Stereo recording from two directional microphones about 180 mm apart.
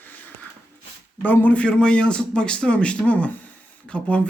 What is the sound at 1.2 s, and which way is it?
Speech, 10° left (ahead or behind).